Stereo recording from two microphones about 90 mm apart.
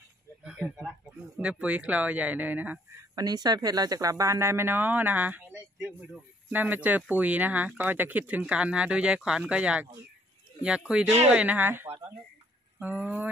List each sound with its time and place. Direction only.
0.4 s a sound: 15° right (ahead or behind)
1.4 s speech: 15° right (ahead or behind)
3.0 s speech: 45° right (ahead or behind); by 13.3 s 20° right (ahead or behind)